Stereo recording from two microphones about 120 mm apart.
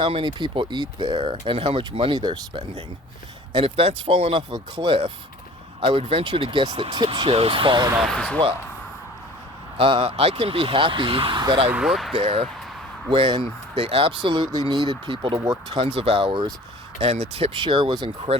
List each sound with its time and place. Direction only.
0.0 s speech: 45° right (ahead or behind)
1.1 s speech: 50° right (ahead or behind)
3.5 s speech: 50° right (ahead or behind)
8.0 s speech: 10° left (ahead or behind)
9.7 s speech: 50° right (ahead or behind)
11.7 s speech: 5° right (ahead or behind)
12.1 s speech: 45° right (ahead or behind)
13.7 s speech: 55° right (ahead or behind)
17.3 s speech: 55° right (ahead or behind)
17.6 s speech: 40° right (ahead or behind)